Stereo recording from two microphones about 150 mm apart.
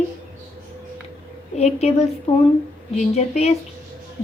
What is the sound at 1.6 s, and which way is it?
A woman's voice, 45° left (ahead or behind).